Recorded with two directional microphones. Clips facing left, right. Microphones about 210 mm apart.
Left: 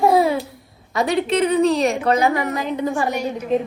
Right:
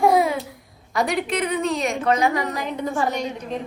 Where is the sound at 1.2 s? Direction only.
25° left (ahead or behind).